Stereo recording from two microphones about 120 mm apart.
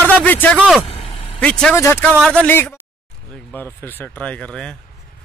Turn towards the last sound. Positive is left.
turn(degrees=5)  # may be behind; listen again after turning